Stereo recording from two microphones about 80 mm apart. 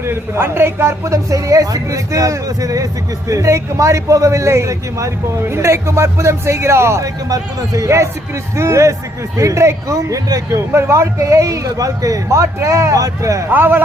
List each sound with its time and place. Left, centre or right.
0.0 s speech: right
10.7 s speech: right
13.5 s speech: right